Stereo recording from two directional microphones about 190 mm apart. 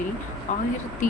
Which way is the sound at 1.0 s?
45° left (ahead or behind).